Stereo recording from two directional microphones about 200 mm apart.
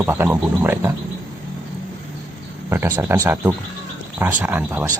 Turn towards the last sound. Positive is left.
turn(degrees=-10)  # may be behind; listen again after turning